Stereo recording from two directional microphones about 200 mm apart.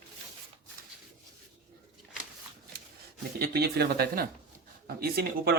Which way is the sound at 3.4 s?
50° right (ahead or behind).